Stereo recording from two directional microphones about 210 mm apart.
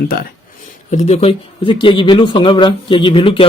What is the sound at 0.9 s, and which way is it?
Speech, 30° left (ahead or behind).